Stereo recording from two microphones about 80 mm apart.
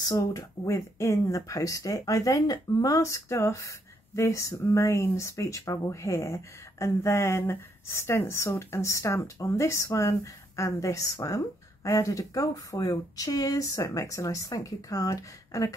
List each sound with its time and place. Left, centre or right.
0.0 s speech: left